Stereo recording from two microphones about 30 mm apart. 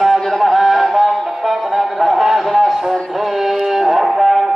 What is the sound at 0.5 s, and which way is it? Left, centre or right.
Music, centre.